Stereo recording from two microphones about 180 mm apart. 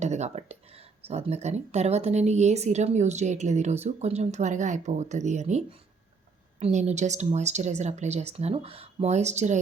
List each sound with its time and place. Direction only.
0.0 s speech: 40° right (ahead or behind)